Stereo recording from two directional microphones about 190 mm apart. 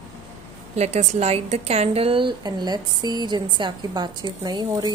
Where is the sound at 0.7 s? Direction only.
35° right (ahead or behind).